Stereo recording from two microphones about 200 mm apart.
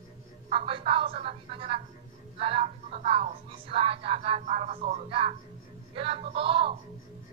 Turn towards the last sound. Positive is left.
turn(degrees=-25)  # may be behind; listen again after turning